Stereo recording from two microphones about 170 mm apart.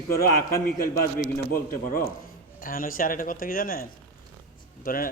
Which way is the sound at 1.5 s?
60° left (ahead or behind).